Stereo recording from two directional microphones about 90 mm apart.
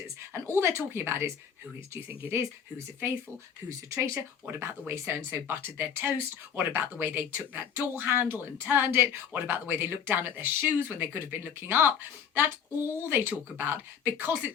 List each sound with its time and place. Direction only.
0.2 s speech: 30° right (ahead or behind)